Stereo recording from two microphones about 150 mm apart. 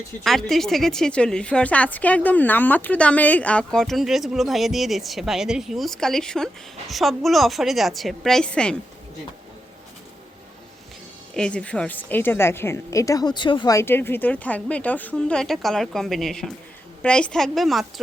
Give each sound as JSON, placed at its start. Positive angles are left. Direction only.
{"t": 0.2, "sound": "a woman's voice", "side_deg": 0}
{"t": 11.3, "sound": "speech", "side_deg": 5}
{"t": 13.7, "sound": "a woman's voice", "side_deg": 15}